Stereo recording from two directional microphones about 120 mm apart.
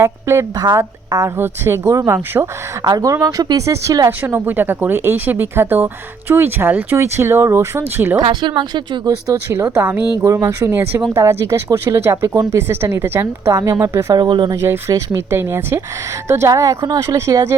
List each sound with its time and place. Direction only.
0.0 s speech: 20° right (ahead or behind)
2.8 s speech: 30° right (ahead or behind)
8.2 s speech: 40° right (ahead or behind)
9.0 s speech: 25° right (ahead or behind)
14.1 s speech: 40° right (ahead or behind)
14.5 s speech: 25° right (ahead or behind)